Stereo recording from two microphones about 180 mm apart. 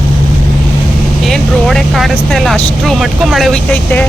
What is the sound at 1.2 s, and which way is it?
Speech, centre (ahead or behind).